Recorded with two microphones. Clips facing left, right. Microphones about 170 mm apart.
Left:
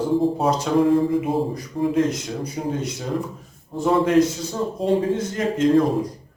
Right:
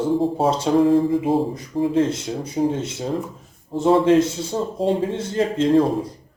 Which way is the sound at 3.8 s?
30° right (ahead or behind).